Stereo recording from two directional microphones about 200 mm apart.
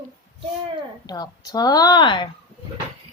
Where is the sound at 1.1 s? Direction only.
20° left (ahead or behind).